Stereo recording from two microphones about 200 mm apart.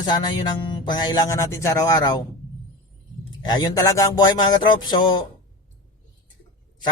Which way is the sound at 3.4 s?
20° left (ahead or behind).